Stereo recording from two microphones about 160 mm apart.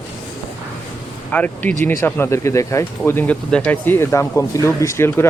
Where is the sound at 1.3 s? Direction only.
10° left (ahead or behind).